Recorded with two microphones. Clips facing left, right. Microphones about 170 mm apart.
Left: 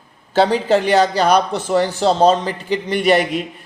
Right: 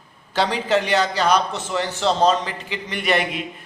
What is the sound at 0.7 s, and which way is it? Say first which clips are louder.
A man's voice: left 5 dB; 50° left (ahead or behind).